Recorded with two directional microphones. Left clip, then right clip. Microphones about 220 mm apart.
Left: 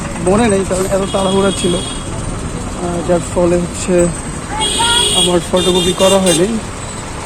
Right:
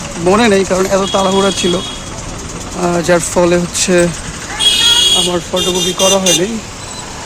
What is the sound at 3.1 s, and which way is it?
Speech, 25° right (ahead or behind).